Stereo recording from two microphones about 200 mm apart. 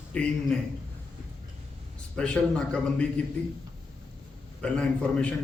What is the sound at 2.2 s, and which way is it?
A man's voice, 5° left (ahead or behind).